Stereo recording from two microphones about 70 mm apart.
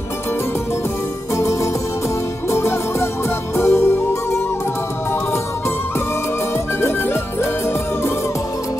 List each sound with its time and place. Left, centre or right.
1.3 s music: left